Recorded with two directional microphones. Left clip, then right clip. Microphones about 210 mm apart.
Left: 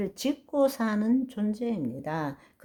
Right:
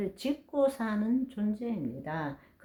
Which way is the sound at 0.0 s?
40° left (ahead or behind).